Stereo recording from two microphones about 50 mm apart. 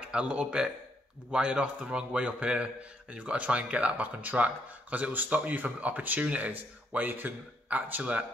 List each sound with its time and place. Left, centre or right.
0.1 s a man's voice: right